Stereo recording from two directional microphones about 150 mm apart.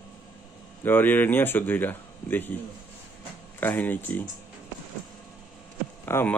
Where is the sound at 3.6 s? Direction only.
15° left (ahead or behind).